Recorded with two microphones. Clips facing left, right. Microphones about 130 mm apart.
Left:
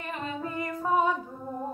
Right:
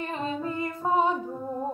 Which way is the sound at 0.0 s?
30° right (ahead or behind).